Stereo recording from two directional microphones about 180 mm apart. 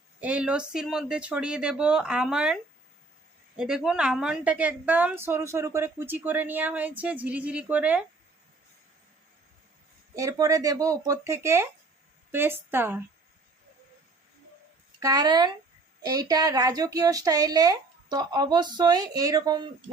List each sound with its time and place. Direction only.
0.2 s speech: 5° right (ahead or behind)
3.6 s a woman's voice: 5° right (ahead or behind)
10.2 s a woman's voice: 20° right (ahead or behind)
15.0 s a woman's voice: 20° right (ahead or behind)